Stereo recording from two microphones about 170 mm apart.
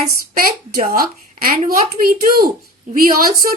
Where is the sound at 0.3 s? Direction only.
60° right (ahead or behind).